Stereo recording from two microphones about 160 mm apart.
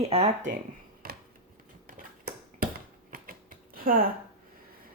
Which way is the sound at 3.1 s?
60° right (ahead or behind).